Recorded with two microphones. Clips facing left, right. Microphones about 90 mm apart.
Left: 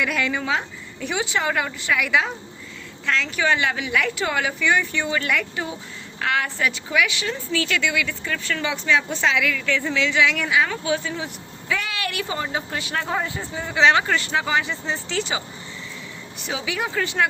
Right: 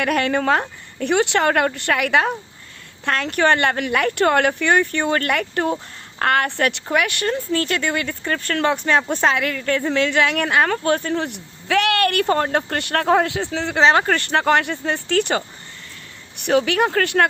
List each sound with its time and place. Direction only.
0.0 s a woman's voice: 55° right (ahead or behind); by 13.7 s 80° right
13.7 s a woman's voice: 45° right (ahead or behind); by 17.2 s 60° right (ahead or behind)